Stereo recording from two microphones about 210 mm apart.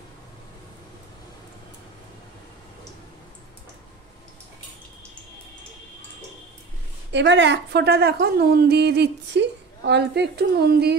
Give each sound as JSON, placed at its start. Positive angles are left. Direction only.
{"t": 7.1, "sound": "a woman's voice", "side_deg": -55}